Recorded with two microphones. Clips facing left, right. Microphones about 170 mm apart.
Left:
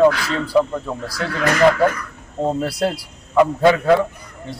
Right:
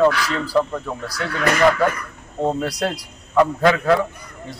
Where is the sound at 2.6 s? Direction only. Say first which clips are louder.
Left 2 dB; 30° left (ahead or behind).